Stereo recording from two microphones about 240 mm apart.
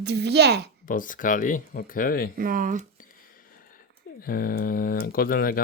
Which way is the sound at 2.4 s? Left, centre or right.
Right.